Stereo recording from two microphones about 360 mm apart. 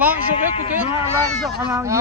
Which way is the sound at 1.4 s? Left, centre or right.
Centre.